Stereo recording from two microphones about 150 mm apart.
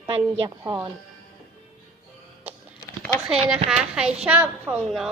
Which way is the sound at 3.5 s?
5° right (ahead or behind).